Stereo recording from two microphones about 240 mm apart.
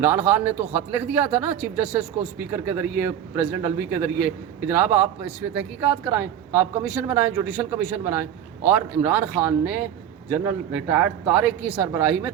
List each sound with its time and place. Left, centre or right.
0.0 s a man's voice: centre